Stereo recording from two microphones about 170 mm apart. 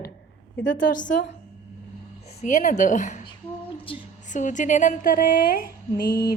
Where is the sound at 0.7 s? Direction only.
50° left (ahead or behind).